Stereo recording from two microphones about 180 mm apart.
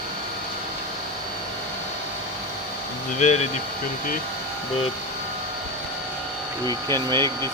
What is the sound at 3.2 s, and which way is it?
Speech, 40° left (ahead or behind).